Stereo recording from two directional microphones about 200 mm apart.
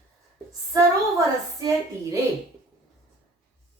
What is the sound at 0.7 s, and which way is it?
Speech, 15° right (ahead or behind).